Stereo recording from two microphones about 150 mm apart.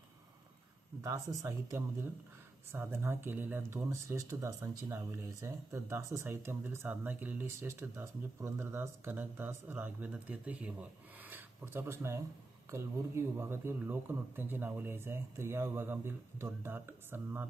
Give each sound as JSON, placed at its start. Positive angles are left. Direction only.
{"t": 1.0, "sound": "speech", "side_deg": -20}